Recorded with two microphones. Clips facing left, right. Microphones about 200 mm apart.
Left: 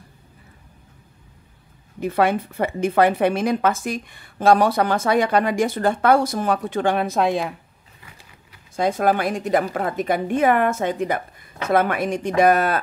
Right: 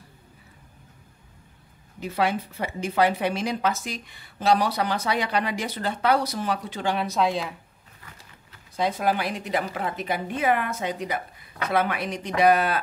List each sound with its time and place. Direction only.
2.0 s a woman's voice: 55° left (ahead or behind)
8.7 s a woman's voice: 45° left (ahead or behind)